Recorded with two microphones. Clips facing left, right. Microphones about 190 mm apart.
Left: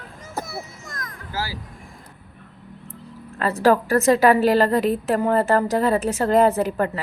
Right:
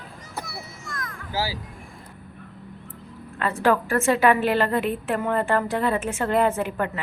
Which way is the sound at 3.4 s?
40° left (ahead or behind).